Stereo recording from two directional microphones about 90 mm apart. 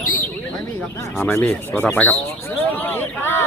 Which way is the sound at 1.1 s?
15° left (ahead or behind).